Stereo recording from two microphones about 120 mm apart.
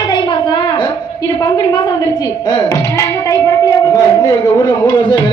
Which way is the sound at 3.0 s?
25° left (ahead or behind).